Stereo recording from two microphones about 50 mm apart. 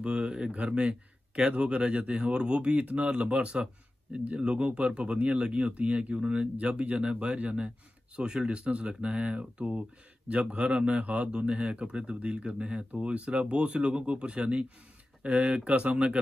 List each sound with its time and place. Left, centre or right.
0.0 s speech: centre
8.2 s speech: centre